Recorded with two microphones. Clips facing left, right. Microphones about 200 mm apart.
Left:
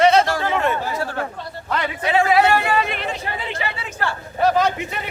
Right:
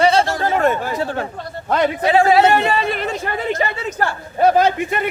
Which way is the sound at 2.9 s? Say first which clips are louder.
Right 4 dB; 45° right (ahead or behind).